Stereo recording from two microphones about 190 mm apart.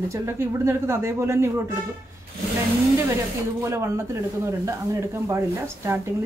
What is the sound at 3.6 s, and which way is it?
Speech, 15° right (ahead or behind).